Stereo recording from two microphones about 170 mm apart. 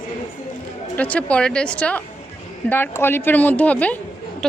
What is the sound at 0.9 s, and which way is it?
A woman's voice, 10° left (ahead or behind).